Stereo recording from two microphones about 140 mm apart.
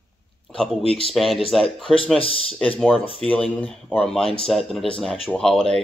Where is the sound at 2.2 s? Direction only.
40° left (ahead or behind).